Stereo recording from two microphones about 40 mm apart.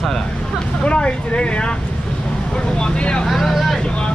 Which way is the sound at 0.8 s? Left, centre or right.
Left.